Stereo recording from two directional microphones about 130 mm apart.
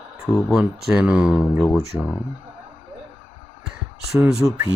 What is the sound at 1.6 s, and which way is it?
Speech, 5° left (ahead or behind).